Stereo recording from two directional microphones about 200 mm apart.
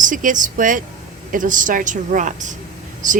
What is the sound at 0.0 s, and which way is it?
A woman's voice, 40° right (ahead or behind).